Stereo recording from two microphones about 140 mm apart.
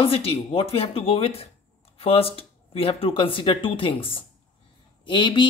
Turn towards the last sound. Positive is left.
turn(degrees=35)  # may be behind; listen again after turning